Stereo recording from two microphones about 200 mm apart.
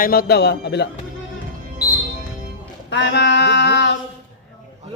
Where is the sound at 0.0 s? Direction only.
50° left (ahead or behind).